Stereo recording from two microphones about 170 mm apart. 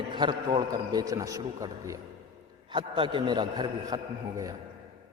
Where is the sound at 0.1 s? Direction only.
25° right (ahead or behind).